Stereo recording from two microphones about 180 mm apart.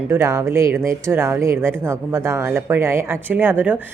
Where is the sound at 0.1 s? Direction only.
15° right (ahead or behind).